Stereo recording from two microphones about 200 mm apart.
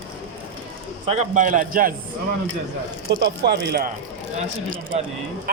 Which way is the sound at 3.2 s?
60° right (ahead or behind).